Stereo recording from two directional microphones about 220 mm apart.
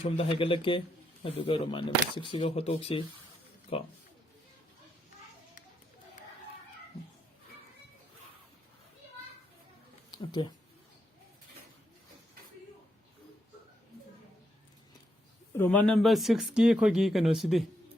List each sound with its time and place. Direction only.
0.0 s speech: 25° left (ahead or behind)
10.1 s a sound: 20° left (ahead or behind)
15.5 s speech: 10° left (ahead or behind)